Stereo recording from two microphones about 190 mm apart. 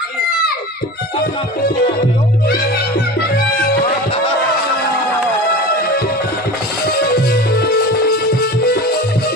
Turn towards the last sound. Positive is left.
turn(degrees=55)  # may be behind; listen again after turning